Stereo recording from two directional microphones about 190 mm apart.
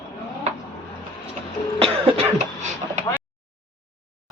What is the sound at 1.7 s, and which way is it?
Cough, 30° right (ahead or behind).